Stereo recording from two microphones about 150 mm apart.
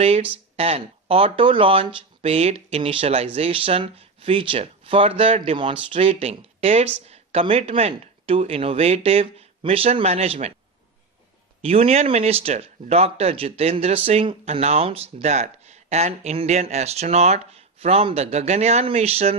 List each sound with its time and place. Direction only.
0.0 s speech: 40° right (ahead or behind)
11.6 s speech: 40° right (ahead or behind)